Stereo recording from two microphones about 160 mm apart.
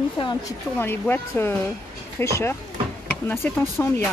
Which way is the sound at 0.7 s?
10° left (ahead or behind).